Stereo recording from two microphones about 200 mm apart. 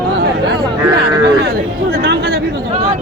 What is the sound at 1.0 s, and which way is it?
Speech, 50° right (ahead or behind).